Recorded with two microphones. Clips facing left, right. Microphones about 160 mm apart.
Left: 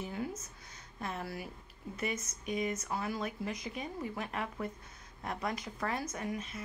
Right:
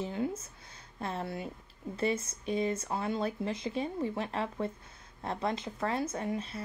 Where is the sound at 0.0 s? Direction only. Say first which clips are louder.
Right 5 dB; 25° right (ahead or behind).